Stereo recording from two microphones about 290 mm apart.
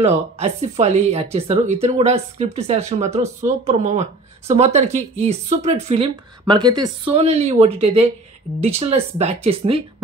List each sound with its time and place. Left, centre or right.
0.0 s speech: right